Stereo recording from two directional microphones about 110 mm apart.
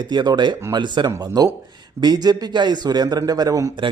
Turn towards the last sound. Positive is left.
turn(degrees=-30)  # may be behind; listen again after turning